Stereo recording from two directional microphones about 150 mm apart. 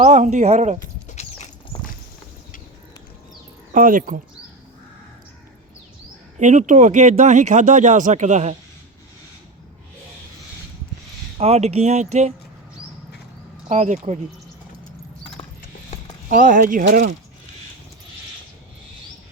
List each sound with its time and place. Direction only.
0.0 s speech: 50° right (ahead or behind)
1.0 s a sound: 50° left (ahead or behind)
3.7 s speech: 60° right (ahead or behind)
6.4 s speech: 55° right (ahead or behind)
11.3 s speech: 45° right (ahead or behind)
13.7 s speech: 55° right (ahead or behind)
16.3 s speech: 65° right (ahead or behind)